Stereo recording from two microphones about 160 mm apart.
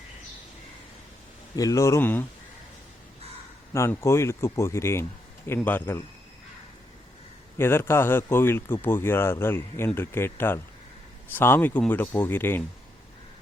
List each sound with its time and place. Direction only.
1.5 s speech: 20° left (ahead or behind)
3.7 s speech: 15° left (ahead or behind)
7.6 s speech: 15° left (ahead or behind)